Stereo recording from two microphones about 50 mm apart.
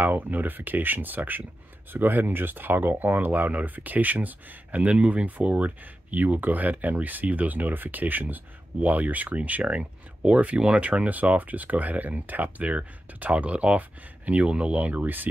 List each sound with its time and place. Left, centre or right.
0.0 s speech: right